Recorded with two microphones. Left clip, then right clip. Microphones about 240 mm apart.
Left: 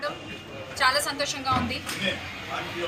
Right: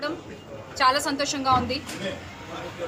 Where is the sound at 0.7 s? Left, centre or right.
Right.